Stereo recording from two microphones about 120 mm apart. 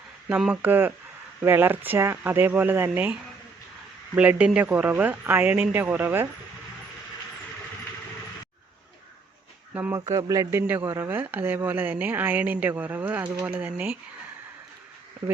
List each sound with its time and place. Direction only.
0.3 s speech: 10° right (ahead or behind)
9.7 s speech: 15° right (ahead or behind)
10.1 s speech: 30° right (ahead or behind)